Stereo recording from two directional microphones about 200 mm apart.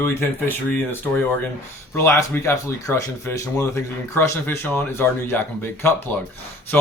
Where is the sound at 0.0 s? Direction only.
10° left (ahead or behind).